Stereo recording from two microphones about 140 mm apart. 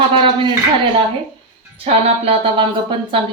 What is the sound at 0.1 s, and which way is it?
Speech, 40° right (ahead or behind).